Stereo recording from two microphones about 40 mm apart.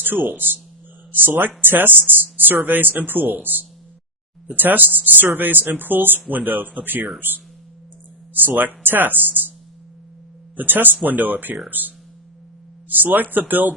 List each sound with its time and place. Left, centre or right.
0.0 s speech: right
10.6 s speech: right